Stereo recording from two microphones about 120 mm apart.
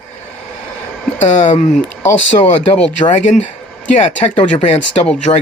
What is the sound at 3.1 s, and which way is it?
Speech, 80° left.